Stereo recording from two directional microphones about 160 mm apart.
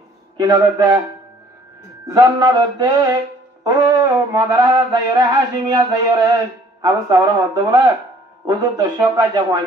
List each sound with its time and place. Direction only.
0.4 s mantra: 25° right (ahead or behind)
2.0 s mantra: 20° right (ahead or behind)